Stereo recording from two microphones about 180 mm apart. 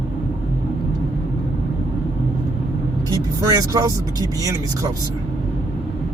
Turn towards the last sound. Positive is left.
turn(degrees=-20)  # may be behind; listen again after turning